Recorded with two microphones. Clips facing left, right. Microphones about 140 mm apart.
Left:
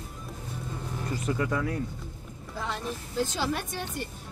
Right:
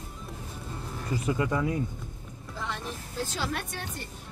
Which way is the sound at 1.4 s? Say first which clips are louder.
Right 1 dB; 20° right (ahead or behind).